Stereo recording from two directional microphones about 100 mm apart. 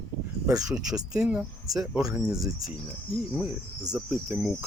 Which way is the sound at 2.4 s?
5° right (ahead or behind).